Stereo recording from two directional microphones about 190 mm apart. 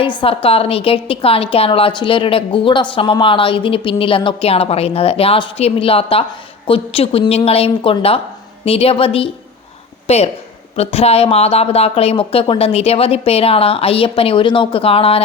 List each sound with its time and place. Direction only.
0.4 s a woman's voice: 30° left (ahead or behind)